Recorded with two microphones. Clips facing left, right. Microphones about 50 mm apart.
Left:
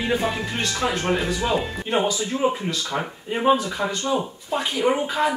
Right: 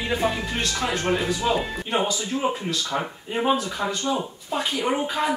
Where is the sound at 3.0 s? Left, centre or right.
Centre.